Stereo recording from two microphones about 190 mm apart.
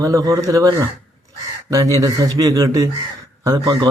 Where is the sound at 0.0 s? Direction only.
20° right (ahead or behind).